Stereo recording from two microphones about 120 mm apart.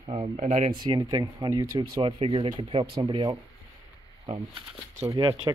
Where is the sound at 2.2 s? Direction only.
50° right (ahead or behind).